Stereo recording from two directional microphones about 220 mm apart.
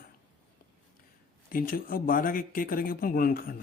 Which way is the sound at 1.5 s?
40° left (ahead or behind).